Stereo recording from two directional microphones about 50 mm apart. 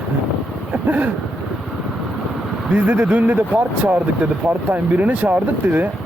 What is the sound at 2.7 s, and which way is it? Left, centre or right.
Speech, right.